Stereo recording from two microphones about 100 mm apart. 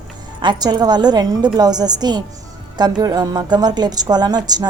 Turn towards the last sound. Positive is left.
turn(degrees=-45)  # may be behind; listen again after turning